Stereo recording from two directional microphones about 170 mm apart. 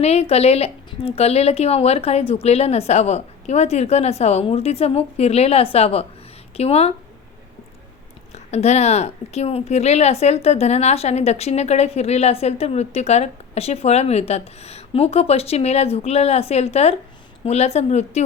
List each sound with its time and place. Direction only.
0.0 s a woman's voice: 40° left (ahead or behind)
8.4 s a woman's voice: 40° left (ahead or behind)